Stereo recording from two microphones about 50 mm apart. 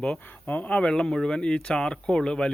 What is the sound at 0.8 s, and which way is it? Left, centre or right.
Speech, centre.